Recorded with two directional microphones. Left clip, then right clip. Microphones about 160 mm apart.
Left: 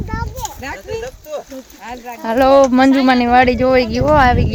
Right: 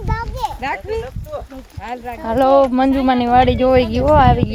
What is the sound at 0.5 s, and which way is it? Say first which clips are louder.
Speech: right 3 dB; 60° right (ahead or behind).